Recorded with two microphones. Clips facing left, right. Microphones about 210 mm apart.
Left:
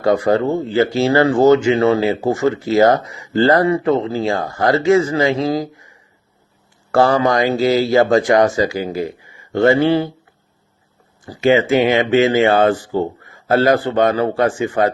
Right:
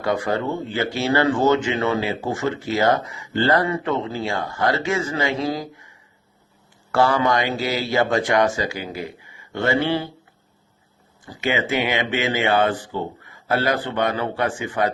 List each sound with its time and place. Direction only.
0.0 s speech: 35° left (ahead or behind)
6.9 s speech: 40° left (ahead or behind)
11.3 s speech: 40° left (ahead or behind)